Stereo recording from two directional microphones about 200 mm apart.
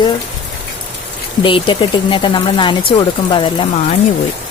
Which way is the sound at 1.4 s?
25° left (ahead or behind).